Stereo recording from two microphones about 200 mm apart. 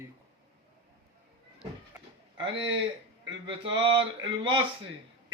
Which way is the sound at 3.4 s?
25° right (ahead or behind).